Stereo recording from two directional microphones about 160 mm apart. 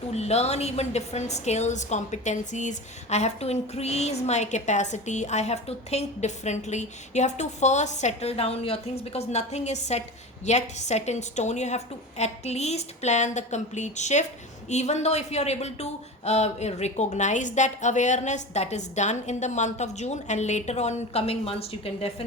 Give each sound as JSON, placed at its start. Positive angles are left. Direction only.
{"t": 0.1, "sound": "a woman's voice", "side_deg": 40}